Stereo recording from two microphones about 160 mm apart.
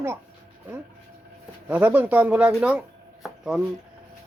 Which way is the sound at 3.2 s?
5° right (ahead or behind).